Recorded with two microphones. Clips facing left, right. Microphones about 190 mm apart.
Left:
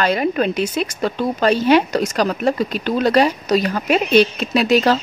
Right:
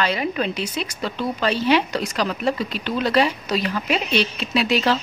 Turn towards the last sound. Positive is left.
turn(degrees=45)  # may be behind; listen again after turning